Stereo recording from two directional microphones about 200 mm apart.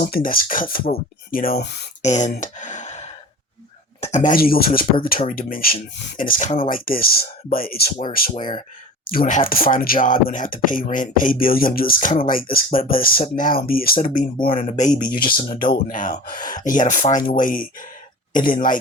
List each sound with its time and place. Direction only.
0.0 s speech: 45° left (ahead or behind)
2.0 s speech: 35° left (ahead or behind)
4.0 s speech: 35° left (ahead or behind)